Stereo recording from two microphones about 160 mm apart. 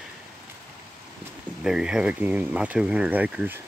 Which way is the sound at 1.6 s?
5° right (ahead or behind).